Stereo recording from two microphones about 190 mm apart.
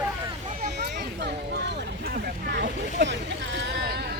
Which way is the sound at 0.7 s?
60° right (ahead or behind).